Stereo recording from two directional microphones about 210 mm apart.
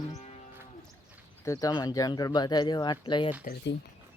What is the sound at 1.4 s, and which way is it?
Speech, 15° left (ahead or behind).